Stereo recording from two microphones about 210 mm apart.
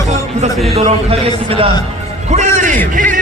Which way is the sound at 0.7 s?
30° right (ahead or behind).